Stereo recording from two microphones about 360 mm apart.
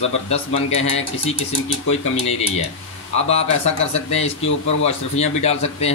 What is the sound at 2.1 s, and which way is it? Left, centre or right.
Speech, centre.